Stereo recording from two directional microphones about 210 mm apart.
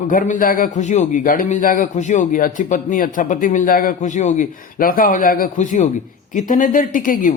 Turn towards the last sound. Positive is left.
turn(degrees=40)  # may be behind; listen again after turning